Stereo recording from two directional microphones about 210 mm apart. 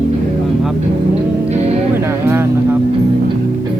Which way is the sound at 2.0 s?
10° right (ahead or behind).